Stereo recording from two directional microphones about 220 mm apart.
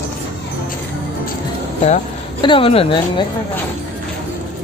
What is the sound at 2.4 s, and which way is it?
Speech, 25° left (ahead or behind).